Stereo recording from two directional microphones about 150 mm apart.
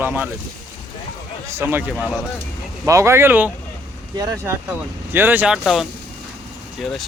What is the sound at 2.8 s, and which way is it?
Speech, 20° right (ahead or behind).